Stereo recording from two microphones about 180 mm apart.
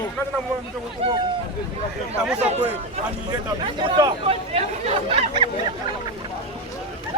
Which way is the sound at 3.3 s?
25° right (ahead or behind).